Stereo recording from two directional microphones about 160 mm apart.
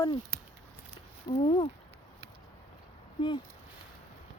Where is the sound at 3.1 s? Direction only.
30° left (ahead or behind).